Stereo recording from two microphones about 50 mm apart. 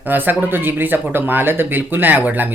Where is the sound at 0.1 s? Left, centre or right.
Right.